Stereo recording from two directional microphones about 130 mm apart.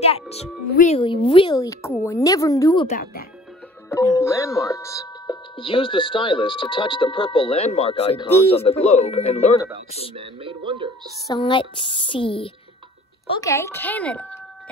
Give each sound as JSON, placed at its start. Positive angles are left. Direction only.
{"t": 0.0, "sound": "speech", "side_deg": 55}
{"t": 0.9, "sound": "a woman's voice", "side_deg": 40}
{"t": 1.6, "sound": "a woman's voice", "side_deg": 25}
{"t": 3.9, "sound": "speech", "side_deg": 20}
{"t": 5.6, "sound": "speech", "side_deg": 45}
{"t": 10.1, "sound": "speech", "side_deg": -40}
{"t": 11.3, "sound": "a woman's voice", "side_deg": 40}
{"t": 13.4, "sound": "speech", "side_deg": 20}